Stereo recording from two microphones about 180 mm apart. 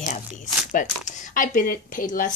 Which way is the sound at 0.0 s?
45° left (ahead or behind).